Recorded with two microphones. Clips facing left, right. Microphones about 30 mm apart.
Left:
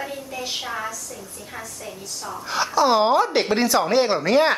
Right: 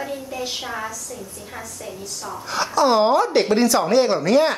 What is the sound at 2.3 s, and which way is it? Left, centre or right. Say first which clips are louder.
Speech: even; centre.